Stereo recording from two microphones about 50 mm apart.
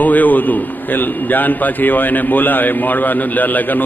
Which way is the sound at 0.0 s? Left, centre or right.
Left.